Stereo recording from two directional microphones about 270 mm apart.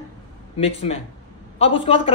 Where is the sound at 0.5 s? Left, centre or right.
Left.